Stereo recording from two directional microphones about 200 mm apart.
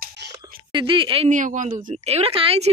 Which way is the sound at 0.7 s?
25° right (ahead or behind).